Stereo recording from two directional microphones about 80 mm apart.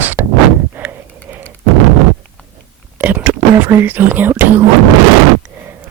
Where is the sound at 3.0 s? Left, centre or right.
Right.